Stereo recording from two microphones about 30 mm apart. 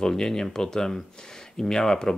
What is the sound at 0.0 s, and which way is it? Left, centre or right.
Speech, centre.